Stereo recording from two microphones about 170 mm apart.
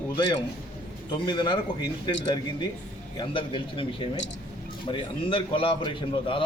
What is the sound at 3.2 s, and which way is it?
Speech, 30° left (ahead or behind).